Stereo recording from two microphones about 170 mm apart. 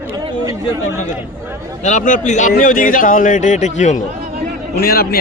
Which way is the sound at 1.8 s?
50° left (ahead or behind).